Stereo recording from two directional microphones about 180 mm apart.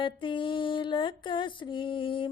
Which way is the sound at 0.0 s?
25° left (ahead or behind).